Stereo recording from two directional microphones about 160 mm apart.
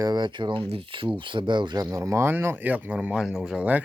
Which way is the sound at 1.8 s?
20° right (ahead or behind).